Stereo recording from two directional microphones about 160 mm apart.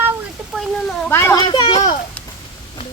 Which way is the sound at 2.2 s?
10° left (ahead or behind).